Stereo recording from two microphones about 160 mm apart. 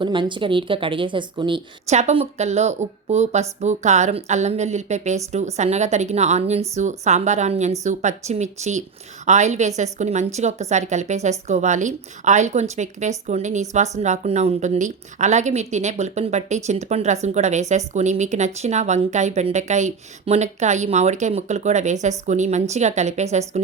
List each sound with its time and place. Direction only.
0.0 s a woman's voice: 30° right (ahead or behind)
1.9 s a woman's voice: 45° right (ahead or behind)